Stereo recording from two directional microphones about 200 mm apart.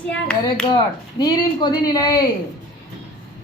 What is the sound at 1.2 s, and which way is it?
Speech, 20° left (ahead or behind).